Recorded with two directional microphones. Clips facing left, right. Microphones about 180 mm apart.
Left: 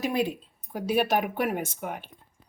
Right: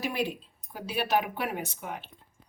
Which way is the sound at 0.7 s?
50° left (ahead or behind).